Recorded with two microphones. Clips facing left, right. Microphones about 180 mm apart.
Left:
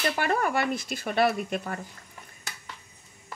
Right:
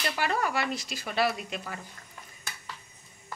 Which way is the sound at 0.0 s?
50° left (ahead or behind).